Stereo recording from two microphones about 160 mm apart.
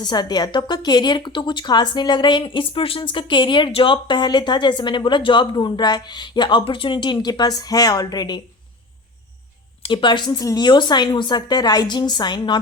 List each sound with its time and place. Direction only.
0.0 s a woman's voice: 25° left (ahead or behind)
9.8 s a woman's voice: 30° left (ahead or behind)